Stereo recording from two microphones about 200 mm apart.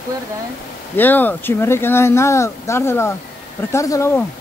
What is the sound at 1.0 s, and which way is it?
Speech, 10° left (ahead or behind).